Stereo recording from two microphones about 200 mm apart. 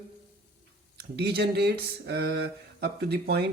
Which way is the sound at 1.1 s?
55° right (ahead or behind).